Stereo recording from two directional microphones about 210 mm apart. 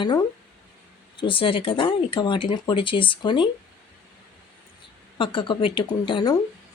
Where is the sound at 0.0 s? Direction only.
20° left (ahead or behind).